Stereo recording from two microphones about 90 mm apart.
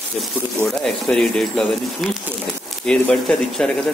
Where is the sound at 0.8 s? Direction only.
5° left (ahead or behind).